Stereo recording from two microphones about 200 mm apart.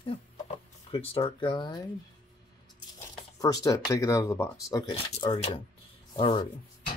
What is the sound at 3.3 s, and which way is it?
Speech, 20° left (ahead or behind).